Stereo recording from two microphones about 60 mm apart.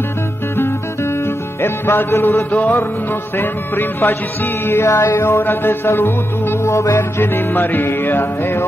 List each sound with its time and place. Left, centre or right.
0.6 s music: left
7.0 s music: left